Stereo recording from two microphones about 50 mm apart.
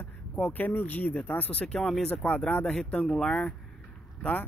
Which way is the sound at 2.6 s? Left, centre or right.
Centre.